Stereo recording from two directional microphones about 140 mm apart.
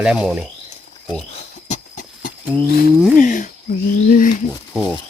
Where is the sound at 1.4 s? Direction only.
60° left (ahead or behind).